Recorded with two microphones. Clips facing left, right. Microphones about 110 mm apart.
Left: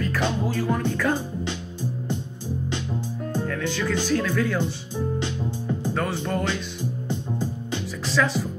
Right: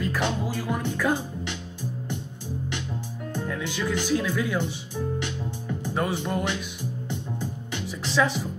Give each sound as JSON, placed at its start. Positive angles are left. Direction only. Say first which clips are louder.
{"t": 0.0, "sound": "music", "louder": "left 2 dB", "side_deg": -15}
{"t": 3.4, "sound": "speech", "louder": "even", "side_deg": -15}
{"t": 4.9, "sound": "music", "louder": "left 3 dB", "side_deg": 20}
{"t": 5.9, "sound": "music", "louder": "right 2 dB", "side_deg": -15}
{"t": 7.1, "sound": "music", "louder": "left 5 dB", "side_deg": 15}
{"t": 8.0, "sound": "music", "louder": "even", "side_deg": -20}